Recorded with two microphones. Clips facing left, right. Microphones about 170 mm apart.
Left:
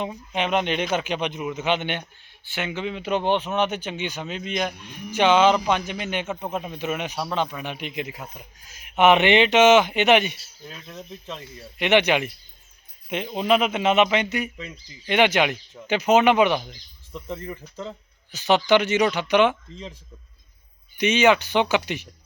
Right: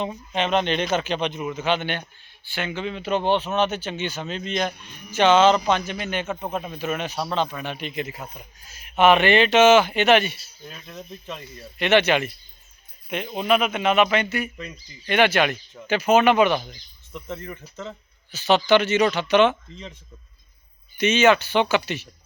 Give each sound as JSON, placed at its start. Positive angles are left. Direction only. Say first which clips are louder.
{"t": 0.0, "sound": "speech", "louder": "right 1 dB", "side_deg": 10}
{"t": 10.6, "sound": "speech", "louder": "even", "side_deg": -5}
{"t": 11.5, "sound": "a man's voice", "louder": "even", "side_deg": 15}
{"t": 18.3, "sound": "speech", "louder": "right 1 dB", "side_deg": 15}
{"t": 19.7, "sound": "speech", "louder": "left 2 dB", "side_deg": 35}
{"t": 21.0, "sound": "speech", "louder": "right 1 dB", "side_deg": 15}